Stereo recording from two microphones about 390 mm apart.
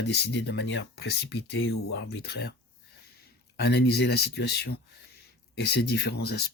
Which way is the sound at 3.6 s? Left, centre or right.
Left.